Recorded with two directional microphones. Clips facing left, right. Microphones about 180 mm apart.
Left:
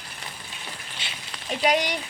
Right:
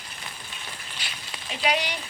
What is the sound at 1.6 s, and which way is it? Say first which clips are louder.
Speech: left 3 dB; 45° left (ahead or behind).